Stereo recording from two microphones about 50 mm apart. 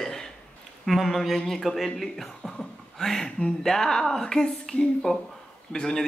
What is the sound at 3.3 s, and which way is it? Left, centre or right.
Speech, centre.